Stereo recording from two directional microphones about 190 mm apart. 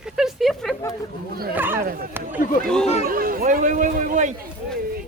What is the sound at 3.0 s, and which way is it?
Speech, 50° right (ahead or behind).